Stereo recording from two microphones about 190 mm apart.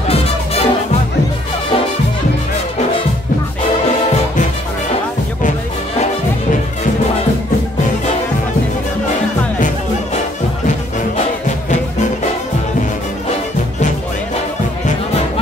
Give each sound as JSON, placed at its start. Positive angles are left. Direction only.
{"t": 0.1, "sound": "music", "side_deg": 30}